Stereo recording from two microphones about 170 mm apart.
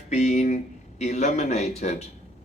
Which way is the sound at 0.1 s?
45° left (ahead or behind).